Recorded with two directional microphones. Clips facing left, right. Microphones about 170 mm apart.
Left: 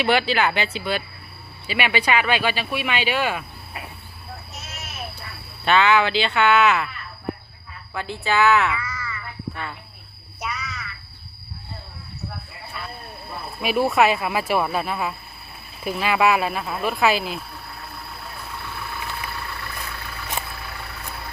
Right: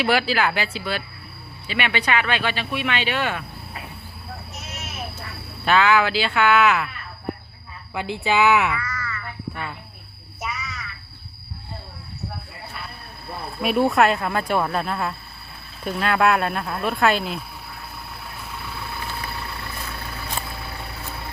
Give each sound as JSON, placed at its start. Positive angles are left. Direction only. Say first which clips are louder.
{"t": 0.0, "sound": "speech", "louder": "left 1 dB", "side_deg": 0}
{"t": 1.6, "sound": "speech", "louder": "left 2 dB", "side_deg": 10}
{"t": 5.6, "sound": "speech", "louder": "even", "side_deg": -5}
{"t": 7.9, "sound": "speech", "louder": "right 1 dB", "side_deg": -15}
{"t": 8.7, "sound": "a sound", "louder": "right 1 dB", "side_deg": 10}
{"t": 10.4, "sound": "a sound", "louder": "even", "side_deg": 0}
{"t": 13.6, "sound": "speech", "louder": "right 1 dB", "side_deg": 0}